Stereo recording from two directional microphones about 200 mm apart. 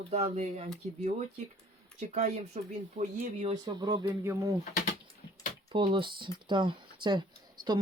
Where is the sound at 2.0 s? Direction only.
35° right (ahead or behind).